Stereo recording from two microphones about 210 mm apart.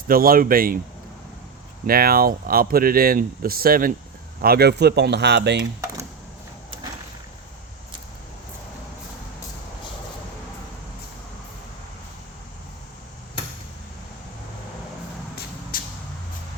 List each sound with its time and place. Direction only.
0.1 s speech: 45° right (ahead or behind)
1.9 s speech: 45° right (ahead or behind)
15.7 s vehicle: 45° left (ahead or behind)